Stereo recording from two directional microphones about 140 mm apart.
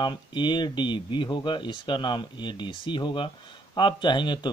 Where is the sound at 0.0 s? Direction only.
35° left (ahead or behind).